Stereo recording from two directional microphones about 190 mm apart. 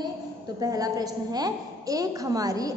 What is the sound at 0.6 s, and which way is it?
A woman's voice, 20° right (ahead or behind).